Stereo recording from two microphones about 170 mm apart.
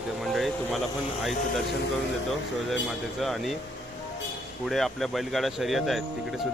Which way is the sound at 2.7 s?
Centre (ahead or behind).